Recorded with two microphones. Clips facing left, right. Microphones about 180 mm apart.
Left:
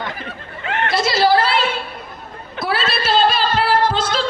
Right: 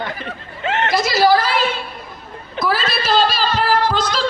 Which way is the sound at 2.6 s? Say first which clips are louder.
Right 1 dB; 40° right (ahead or behind).